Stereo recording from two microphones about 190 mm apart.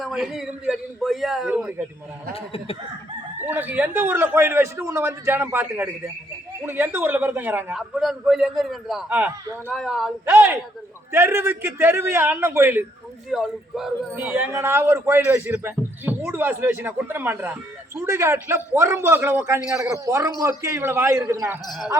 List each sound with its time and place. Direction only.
0.0 s a man's voice: centre (ahead or behind)
2.3 s speech: 30° left (ahead or behind)
3.4 s a man's voice: 10° right (ahead or behind)
10.2 s a man's voice: 10° right (ahead or behind)